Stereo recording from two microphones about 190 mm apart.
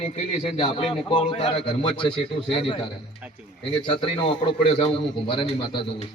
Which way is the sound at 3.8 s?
25° left (ahead or behind).